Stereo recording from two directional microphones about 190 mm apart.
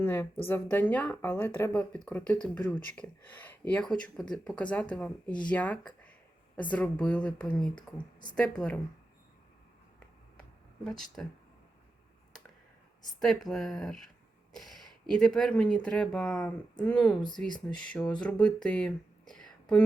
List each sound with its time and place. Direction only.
0.0 s speech: 10° left (ahead or behind)
10.8 s speech: centre (ahead or behind)
13.1 s speech: centre (ahead or behind)
17.2 s speech: 25° left (ahead or behind)
17.7 s speech: 5° left (ahead or behind)